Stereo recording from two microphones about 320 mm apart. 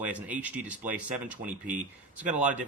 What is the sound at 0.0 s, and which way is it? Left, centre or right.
Speech, centre.